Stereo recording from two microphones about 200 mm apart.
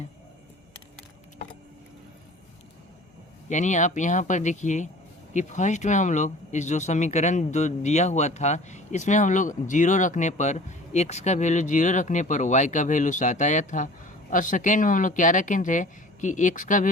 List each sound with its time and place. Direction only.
3.5 s speech: 35° left (ahead or behind)